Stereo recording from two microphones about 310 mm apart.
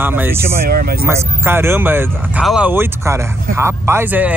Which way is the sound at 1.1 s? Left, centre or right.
Centre.